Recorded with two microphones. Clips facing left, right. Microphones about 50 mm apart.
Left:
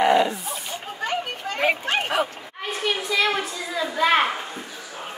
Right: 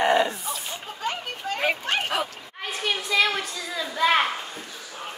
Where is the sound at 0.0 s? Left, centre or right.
Left.